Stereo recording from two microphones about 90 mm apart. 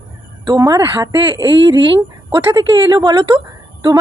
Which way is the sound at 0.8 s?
35° right (ahead or behind).